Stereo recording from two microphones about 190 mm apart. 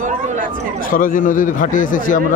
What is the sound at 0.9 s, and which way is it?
Speech, 45° left (ahead or behind).